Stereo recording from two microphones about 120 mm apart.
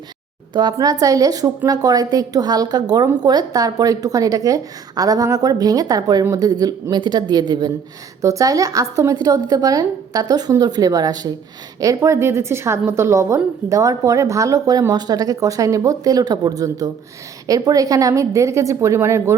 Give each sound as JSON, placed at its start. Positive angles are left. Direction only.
{"t": 0.5, "sound": "a woman's voice", "side_deg": -35}